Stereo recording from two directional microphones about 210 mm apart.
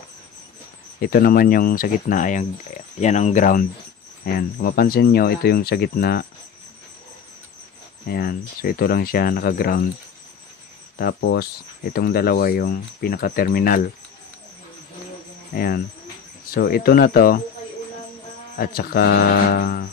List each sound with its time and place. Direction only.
1.0 s speech: 45° left (ahead or behind)
8.1 s speech: 45° left (ahead or behind)
11.0 s speech: 50° left (ahead or behind)
15.5 s speech: 45° left (ahead or behind)
18.6 s speech: 45° left (ahead or behind)